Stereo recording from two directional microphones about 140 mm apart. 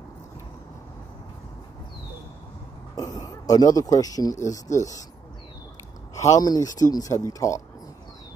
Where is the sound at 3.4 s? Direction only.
25° left (ahead or behind).